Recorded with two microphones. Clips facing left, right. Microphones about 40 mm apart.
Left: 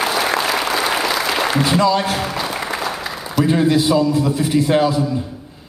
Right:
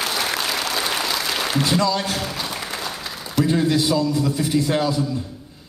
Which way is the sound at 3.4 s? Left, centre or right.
Left.